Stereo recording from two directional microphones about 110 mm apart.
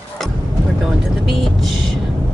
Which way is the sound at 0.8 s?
Centre (ahead or behind).